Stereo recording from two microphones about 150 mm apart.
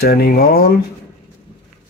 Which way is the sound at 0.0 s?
90° left.